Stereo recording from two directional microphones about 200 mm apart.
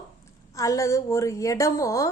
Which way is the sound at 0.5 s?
15° left (ahead or behind).